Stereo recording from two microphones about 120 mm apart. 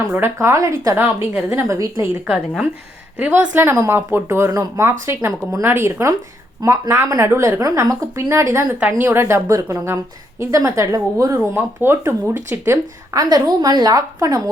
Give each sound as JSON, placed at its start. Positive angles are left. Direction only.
{"t": 0.1, "sound": "speech", "side_deg": -20}
{"t": 0.9, "sound": "a woman's voice", "side_deg": -15}
{"t": 11.3, "sound": "speech", "side_deg": -15}
{"t": 13.2, "sound": "a woman's voice", "side_deg": -35}